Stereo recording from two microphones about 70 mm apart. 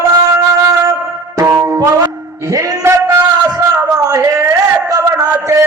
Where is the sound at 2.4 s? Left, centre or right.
Right.